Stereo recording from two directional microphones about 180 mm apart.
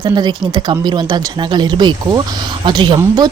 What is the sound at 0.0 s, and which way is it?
Speech, 25° right (ahead or behind).